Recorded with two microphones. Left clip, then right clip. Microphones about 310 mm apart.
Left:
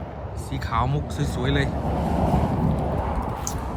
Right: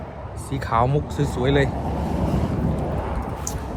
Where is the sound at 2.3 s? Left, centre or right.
Left.